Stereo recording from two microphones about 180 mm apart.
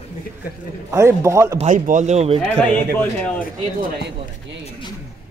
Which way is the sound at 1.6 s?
45° right (ahead or behind).